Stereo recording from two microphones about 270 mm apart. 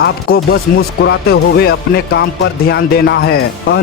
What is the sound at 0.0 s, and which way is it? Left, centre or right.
Speech, left.